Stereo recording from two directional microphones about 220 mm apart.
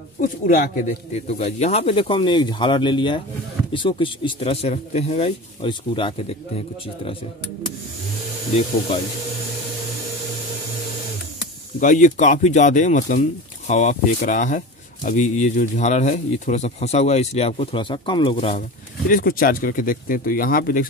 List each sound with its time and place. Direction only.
0.2 s speech: 40° left (ahead or behind)
1.2 s speech: 30° left (ahead or behind)
11.8 s speech: 35° left (ahead or behind)
19.0 s speech: 40° left (ahead or behind)